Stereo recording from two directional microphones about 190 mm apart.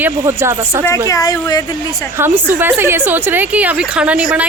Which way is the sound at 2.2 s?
10° right (ahead or behind).